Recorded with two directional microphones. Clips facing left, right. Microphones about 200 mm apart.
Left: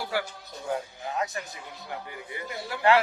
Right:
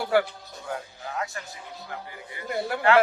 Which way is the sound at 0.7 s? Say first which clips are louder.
Left 3 dB; 20° left (ahead or behind).